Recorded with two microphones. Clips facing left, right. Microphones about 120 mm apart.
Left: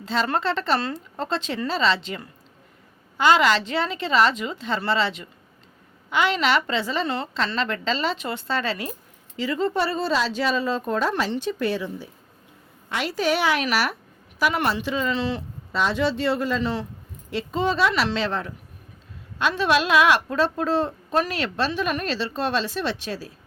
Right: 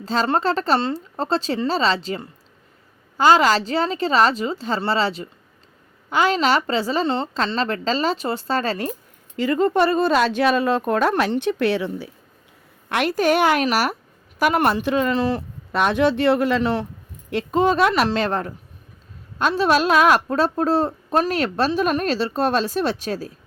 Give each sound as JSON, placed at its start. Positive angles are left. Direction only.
{"t": 0.0, "sound": "a woman's voice", "side_deg": -40}
{"t": 12.9, "sound": "a woman's voice", "side_deg": -55}
{"t": 17.3, "sound": "a woman's voice", "side_deg": -50}